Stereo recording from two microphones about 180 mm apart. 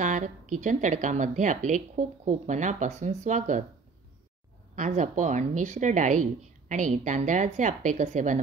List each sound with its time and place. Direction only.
0.0 s a woman's voice: 45° right (ahead or behind)
4.7 s a woman's voice: 45° right (ahead or behind)